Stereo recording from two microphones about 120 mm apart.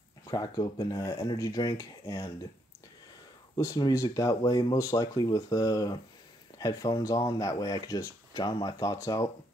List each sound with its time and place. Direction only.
0.2 s speech: 30° left (ahead or behind)
3.5 s speech: 30° left (ahead or behind)